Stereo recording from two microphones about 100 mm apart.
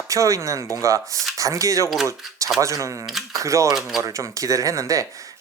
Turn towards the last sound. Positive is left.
turn(degrees=-35)  # may be behind; listen again after turning